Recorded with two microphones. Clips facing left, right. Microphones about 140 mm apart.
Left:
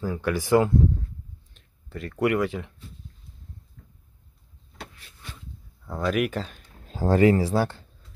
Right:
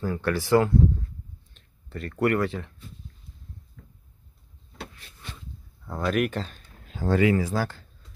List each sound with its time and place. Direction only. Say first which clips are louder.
0.0 s speech: even; 10° left (ahead or behind)
5.9 s speech: even; centre (ahead or behind)
6.9 s speech: left 3 dB; 40° left (ahead or behind)